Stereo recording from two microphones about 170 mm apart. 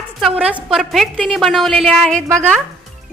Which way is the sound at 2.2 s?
15° right (ahead or behind).